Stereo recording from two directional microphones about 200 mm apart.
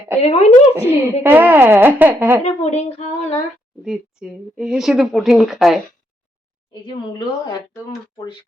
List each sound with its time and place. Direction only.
0.2 s a woman's voice: 30° left (ahead or behind)
0.7 s speech: 10° right (ahead or behind)
2.4 s a woman's voice: 35° left (ahead or behind)
3.8 s speech: 5° right (ahead or behind)
6.8 s speech: 25° left (ahead or behind)